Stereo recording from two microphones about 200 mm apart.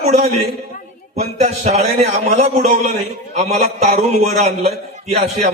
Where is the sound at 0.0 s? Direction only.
35° right (ahead or behind).